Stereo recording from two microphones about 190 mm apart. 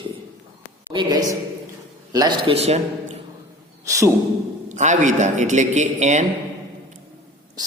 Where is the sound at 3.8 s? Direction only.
15° right (ahead or behind).